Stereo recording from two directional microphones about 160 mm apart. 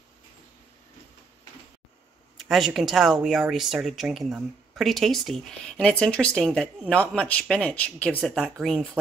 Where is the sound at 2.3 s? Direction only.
Centre (ahead or behind).